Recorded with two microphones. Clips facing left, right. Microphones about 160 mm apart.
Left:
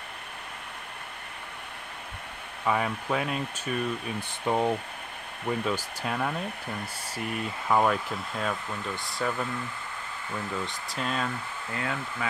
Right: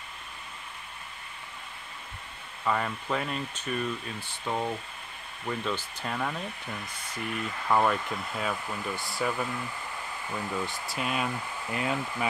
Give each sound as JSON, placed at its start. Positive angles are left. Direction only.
{"t": 2.6, "sound": "speech", "side_deg": 5}
{"t": 4.5, "sound": "speech", "side_deg": 20}
{"t": 5.7, "sound": "speech", "side_deg": 5}
{"t": 7.6, "sound": "speech", "side_deg": 5}